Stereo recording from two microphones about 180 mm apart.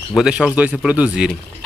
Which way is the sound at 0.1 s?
5° right (ahead or behind).